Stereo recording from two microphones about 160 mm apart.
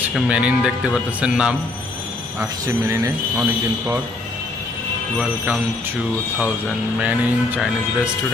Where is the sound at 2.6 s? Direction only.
20° right (ahead or behind).